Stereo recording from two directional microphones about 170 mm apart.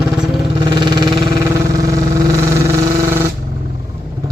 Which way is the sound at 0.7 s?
25° right (ahead or behind).